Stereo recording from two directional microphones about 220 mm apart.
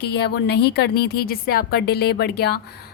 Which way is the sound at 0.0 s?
45° left (ahead or behind).